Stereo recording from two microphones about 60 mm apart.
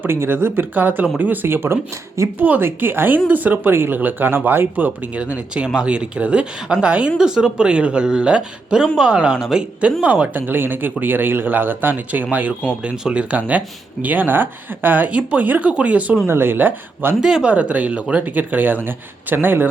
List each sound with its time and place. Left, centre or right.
0.0 s speech: right
2.4 s speech: right
5.1 s speech: centre
9.8 s speech: right
16.2 s speech: right
17.2 s speech: centre
17.5 s speech: right